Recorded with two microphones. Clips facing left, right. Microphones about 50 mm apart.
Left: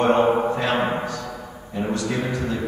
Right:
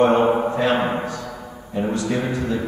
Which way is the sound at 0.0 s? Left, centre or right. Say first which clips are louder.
Right 2 dB; centre.